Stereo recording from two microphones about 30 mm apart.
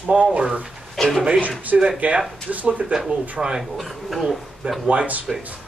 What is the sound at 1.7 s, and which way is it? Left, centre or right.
Speech, right.